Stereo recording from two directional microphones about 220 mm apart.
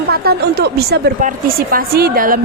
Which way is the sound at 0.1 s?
45° right (ahead or behind).